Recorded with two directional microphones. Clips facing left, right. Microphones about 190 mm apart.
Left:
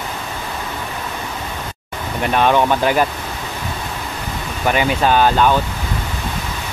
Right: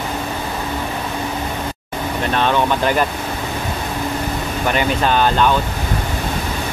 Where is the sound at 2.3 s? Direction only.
10° left (ahead or behind).